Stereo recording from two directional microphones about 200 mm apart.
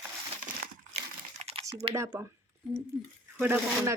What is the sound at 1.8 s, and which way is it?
Speech, 25° right (ahead or behind).